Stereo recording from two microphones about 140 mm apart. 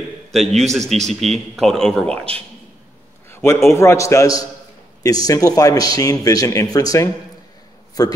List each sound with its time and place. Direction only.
0.3 s a man's voice: centre (ahead or behind)
3.3 s a sound: 15° left (ahead or behind)
3.7 s a man's voice: 20° left (ahead or behind)